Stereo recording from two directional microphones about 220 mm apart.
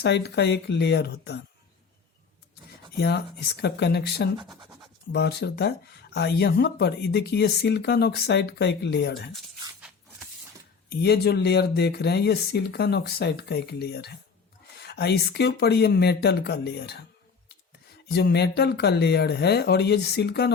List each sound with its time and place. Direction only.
0.0 s speech: 50° left (ahead or behind)
3.0 s speech: 50° left (ahead or behind)
10.8 s speech: 50° left (ahead or behind)
18.1 s speech: 50° left (ahead or behind)